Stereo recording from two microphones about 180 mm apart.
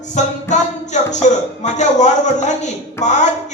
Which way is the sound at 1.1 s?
40° left (ahead or behind).